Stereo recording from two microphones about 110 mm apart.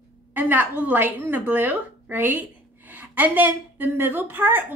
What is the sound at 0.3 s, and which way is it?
A woman's voice, 15° right (ahead or behind).